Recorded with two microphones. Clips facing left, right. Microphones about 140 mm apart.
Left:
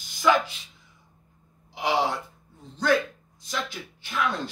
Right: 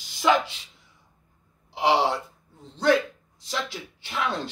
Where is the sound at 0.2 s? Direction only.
20° right (ahead or behind).